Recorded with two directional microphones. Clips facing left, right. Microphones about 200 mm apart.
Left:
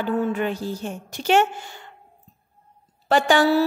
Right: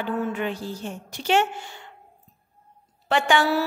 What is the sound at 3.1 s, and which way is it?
Speech, 40° left (ahead or behind).